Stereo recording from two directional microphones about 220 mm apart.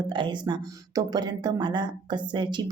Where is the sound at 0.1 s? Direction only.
20° right (ahead or behind).